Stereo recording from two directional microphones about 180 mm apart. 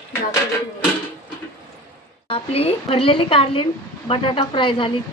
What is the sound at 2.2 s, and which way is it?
A woman's voice, 30° left (ahead or behind).